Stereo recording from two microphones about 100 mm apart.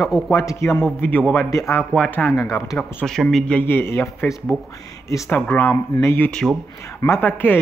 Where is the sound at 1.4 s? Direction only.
35° left (ahead or behind).